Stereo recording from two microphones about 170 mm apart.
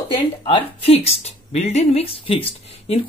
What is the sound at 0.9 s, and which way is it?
Speech, 40° left (ahead or behind).